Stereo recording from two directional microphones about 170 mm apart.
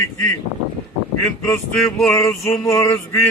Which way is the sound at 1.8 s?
5° left (ahead or behind).